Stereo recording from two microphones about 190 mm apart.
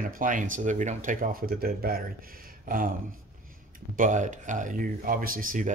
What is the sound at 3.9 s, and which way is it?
Speech, 45° right (ahead or behind).